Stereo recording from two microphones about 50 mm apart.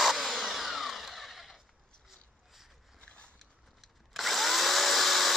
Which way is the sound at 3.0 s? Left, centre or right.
Left.